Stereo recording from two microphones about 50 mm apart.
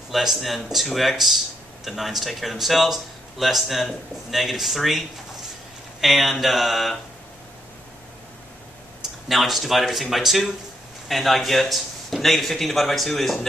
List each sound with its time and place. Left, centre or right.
0.1 s speech: centre
9.3 s speech: centre